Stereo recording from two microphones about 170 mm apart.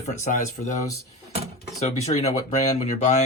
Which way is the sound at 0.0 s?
45° left (ahead or behind).